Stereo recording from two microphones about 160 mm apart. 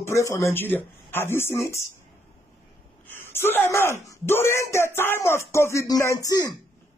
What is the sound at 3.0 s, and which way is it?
Speech, 15° left (ahead or behind).